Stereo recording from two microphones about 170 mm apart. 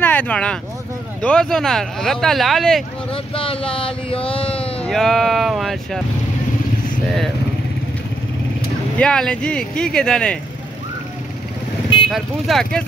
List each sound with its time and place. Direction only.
0.0 s speech: 10° left (ahead or behind)
3.1 s a sound: 30° left (ahead or behind)
4.8 s speech: centre (ahead or behind)
8.9 s speech: 5° left (ahead or behind)
12.1 s speech: centre (ahead or behind)